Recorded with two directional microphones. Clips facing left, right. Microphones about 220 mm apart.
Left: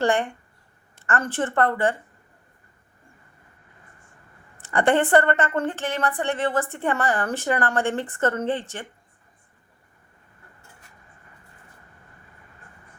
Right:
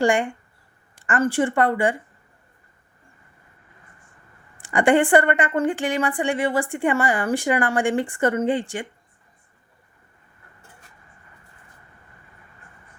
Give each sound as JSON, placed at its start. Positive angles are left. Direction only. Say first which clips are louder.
{"t": 0.0, "sound": "a woman's voice", "louder": "right 2 dB", "side_deg": -15}
{"t": 4.6, "sound": "a woman's voice", "louder": "right 3 dB", "side_deg": -15}